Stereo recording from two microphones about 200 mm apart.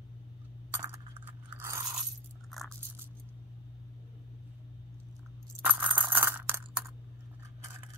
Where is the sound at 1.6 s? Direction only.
15° right (ahead or behind).